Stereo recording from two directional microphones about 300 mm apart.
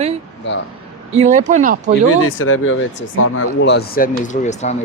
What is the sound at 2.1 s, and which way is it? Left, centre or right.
Speech, left.